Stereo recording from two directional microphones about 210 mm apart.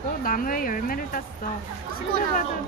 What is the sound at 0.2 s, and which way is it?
Speech, 40° left (ahead or behind).